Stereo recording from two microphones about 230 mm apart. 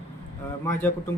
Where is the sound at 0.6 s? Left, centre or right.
Centre.